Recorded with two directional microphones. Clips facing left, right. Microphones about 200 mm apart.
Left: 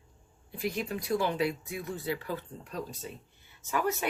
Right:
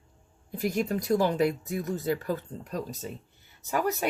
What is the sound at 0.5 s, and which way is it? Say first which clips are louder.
Speech: right 5 dB; 45° right (ahead or behind).